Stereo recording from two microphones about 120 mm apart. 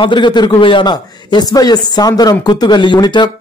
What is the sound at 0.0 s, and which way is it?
A man's voice, 40° left (ahead or behind).